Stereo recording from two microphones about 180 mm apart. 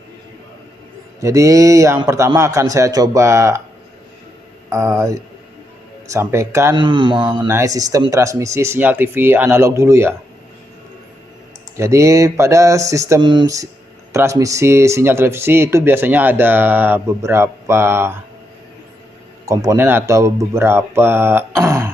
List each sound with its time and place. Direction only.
1.2 s speech: 15° right (ahead or behind)
4.7 s speech: 15° right (ahead or behind)
6.7 s mantra: 25° right (ahead or behind)
7.4 s speech: 15° right (ahead or behind)
11.8 s speech: 15° right (ahead or behind)
19.5 s speech: 15° right (ahead or behind)